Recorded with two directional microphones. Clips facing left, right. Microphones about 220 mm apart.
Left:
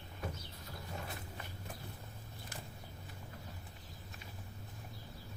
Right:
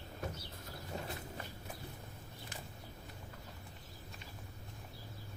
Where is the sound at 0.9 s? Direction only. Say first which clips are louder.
Right 3 dB; 35° right (ahead or behind).